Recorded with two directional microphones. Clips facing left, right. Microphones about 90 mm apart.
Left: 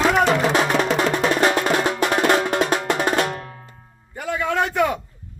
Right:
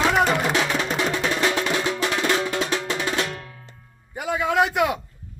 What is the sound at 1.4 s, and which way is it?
Music, 50° left (ahead or behind).